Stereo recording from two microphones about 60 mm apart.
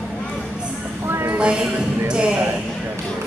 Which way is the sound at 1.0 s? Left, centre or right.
Right.